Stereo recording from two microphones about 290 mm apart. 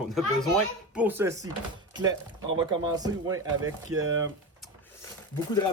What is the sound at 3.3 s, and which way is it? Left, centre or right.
Speech, right.